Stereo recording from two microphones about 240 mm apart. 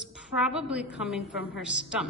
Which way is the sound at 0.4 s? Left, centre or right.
Centre.